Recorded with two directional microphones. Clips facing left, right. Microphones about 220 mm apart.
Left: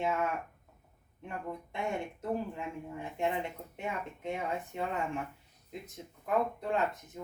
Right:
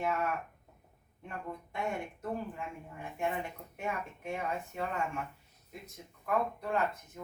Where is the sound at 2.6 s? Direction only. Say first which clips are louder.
Left 4 dB; 20° left (ahead or behind).